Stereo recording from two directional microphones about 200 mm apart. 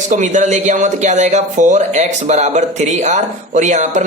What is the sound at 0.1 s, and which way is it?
A woman's voice, 35° right (ahead or behind).